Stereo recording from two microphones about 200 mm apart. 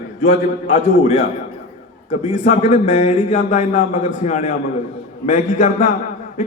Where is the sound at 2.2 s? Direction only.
35° left (ahead or behind).